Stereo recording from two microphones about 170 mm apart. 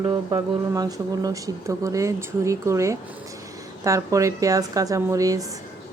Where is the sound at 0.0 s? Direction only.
25° right (ahead or behind).